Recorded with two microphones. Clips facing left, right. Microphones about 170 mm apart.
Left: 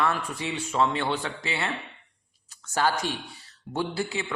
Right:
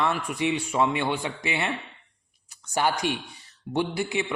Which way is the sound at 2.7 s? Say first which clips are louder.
Right 1 dB; 15° right (ahead or behind).